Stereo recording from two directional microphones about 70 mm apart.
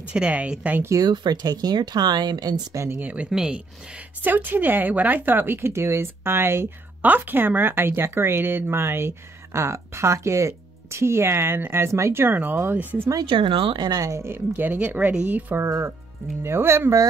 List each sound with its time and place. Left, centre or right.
0.1 s speech: centre
1.0 s speech: right
2.7 s speech: right
3.0 s speech: right
3.3 s speech: centre
4.2 s speech: right
13.7 s speech: right
14.2 s speech: right
15.6 s speech: right